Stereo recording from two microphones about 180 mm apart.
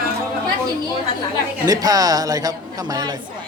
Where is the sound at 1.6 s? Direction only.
20° right (ahead or behind).